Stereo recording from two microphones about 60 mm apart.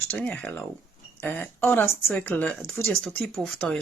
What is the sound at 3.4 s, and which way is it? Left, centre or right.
Speech, centre.